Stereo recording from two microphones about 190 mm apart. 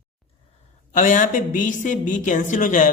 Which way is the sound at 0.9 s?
45° left (ahead or behind).